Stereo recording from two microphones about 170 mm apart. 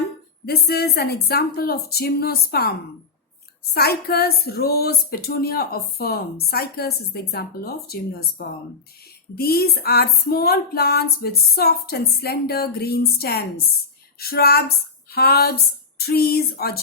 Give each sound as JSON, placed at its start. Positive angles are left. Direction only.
{"t": 0.4, "sound": "speech", "side_deg": 65}